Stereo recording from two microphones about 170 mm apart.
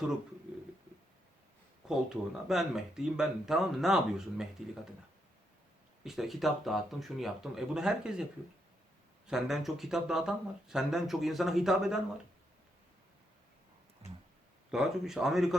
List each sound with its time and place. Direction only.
1.9 s speech: centre (ahead or behind)
6.0 s speech: centre (ahead or behind)
9.2 s speech: centre (ahead or behind)
14.0 s tick-tock: 35° right (ahead or behind)
14.7 s speech: 5° right (ahead or behind)